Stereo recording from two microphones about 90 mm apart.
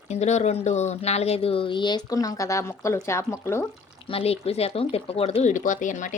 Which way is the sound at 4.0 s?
90° left.